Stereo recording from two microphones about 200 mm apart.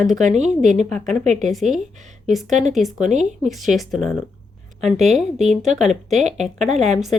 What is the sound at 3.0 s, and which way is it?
Speech, 35° right (ahead or behind).